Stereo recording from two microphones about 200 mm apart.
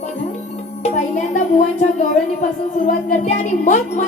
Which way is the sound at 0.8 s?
35° left (ahead or behind).